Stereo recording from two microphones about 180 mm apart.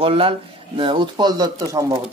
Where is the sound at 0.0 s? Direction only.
30° right (ahead or behind).